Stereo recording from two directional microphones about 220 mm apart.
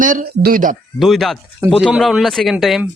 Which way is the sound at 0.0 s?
40° right (ahead or behind).